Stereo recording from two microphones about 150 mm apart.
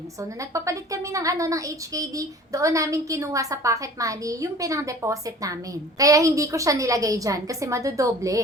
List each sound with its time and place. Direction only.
0.5 s a woman's voice: 20° right (ahead or behind)